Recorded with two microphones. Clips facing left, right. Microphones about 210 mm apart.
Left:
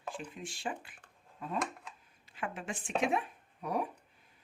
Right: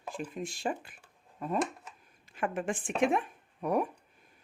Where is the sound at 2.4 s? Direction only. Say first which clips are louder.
Right 7 dB; 50° right (ahead or behind).